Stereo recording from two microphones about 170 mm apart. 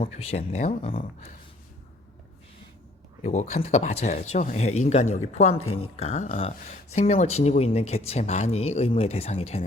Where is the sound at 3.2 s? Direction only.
40° left (ahead or behind).